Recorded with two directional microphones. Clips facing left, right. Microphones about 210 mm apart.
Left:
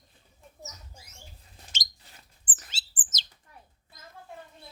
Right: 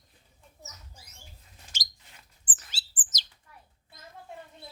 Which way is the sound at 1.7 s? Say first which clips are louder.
Left 2 dB; 25° left (ahead or behind).